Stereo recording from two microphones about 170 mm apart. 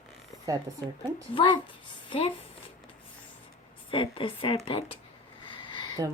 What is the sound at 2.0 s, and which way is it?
Speech, 35° left (ahead or behind).